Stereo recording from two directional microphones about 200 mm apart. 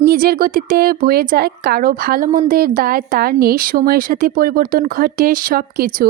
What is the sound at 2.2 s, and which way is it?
Speech, 30° right (ahead or behind).